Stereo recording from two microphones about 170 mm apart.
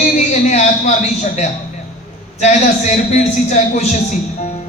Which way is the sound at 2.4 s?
40° left (ahead or behind).